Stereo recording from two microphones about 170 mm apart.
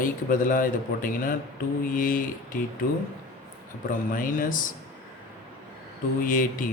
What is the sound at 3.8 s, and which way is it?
Speech, 50° left (ahead or behind).